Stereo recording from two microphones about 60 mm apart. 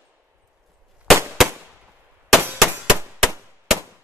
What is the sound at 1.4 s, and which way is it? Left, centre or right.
Firecracker, centre.